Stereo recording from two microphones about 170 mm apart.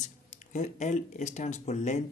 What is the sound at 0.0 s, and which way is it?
Speech, 45° left (ahead or behind).